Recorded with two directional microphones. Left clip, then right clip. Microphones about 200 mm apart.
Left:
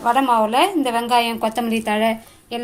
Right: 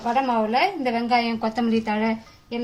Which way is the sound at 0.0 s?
40° left (ahead or behind).